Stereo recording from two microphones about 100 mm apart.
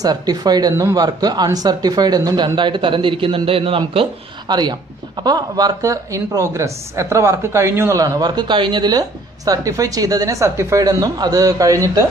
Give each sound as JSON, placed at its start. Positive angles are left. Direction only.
{"t": 0.0, "sound": "a woman's voice", "side_deg": -40}
{"t": 4.5, "sound": "speech", "side_deg": -45}
{"t": 8.0, "sound": "a woman's voice", "side_deg": -40}